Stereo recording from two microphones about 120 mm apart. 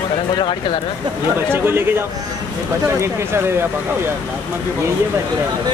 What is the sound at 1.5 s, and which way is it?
Speech, 20° right (ahead or behind).